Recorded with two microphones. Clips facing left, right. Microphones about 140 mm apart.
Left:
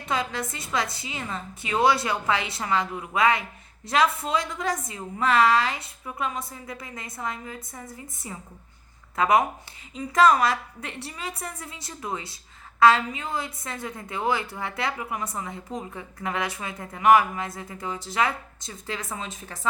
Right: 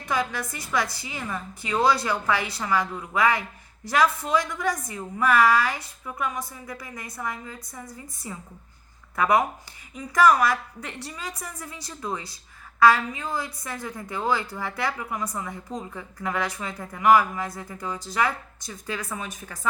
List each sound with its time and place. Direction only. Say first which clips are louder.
0.0 s a woman's voice: right 1 dB; 25° left (ahead or behind)